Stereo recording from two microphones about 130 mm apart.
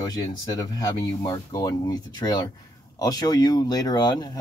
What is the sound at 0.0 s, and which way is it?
Speech, 30° left (ahead or behind).